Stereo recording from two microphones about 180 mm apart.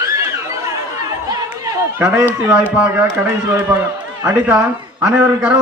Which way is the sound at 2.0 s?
15° right (ahead or behind).